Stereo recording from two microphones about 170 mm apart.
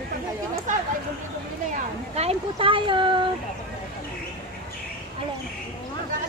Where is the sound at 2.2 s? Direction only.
35° right (ahead or behind).